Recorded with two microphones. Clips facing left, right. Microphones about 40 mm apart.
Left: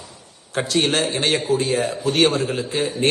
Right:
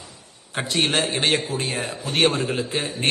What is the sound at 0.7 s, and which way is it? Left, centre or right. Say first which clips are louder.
A man's voice: left 2 dB; right.